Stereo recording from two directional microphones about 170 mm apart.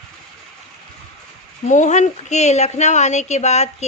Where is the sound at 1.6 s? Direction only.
45° left (ahead or behind).